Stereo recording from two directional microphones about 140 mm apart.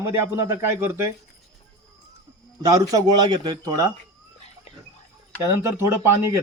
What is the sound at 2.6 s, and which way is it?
Speech, 25° right (ahead or behind).